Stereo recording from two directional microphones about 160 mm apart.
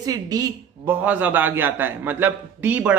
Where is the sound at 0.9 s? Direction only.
10° right (ahead or behind).